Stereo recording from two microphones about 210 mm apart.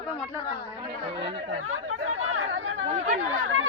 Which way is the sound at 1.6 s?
85° right.